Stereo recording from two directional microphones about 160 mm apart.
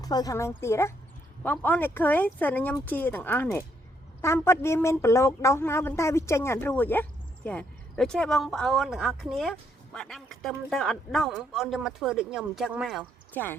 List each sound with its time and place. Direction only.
0.0 s speech: 25° left (ahead or behind); by 13.1 s 5° right (ahead or behind)
13.3 s speech: 10° left (ahead or behind)